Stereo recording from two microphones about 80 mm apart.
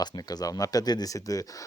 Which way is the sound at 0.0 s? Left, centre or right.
Left.